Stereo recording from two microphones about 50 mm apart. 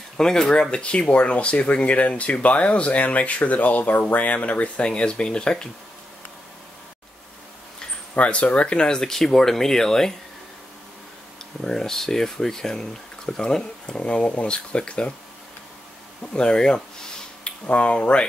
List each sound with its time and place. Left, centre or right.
0.2 s speech: centre
8.1 s speech: left; by 10.1 s centre
11.6 s speech: centre
16.3 s a sound: centre
17.6 s speech: left